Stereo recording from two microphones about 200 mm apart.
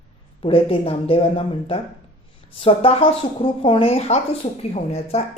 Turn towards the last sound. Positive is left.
turn(degrees=30)  # may be behind; listen again after turning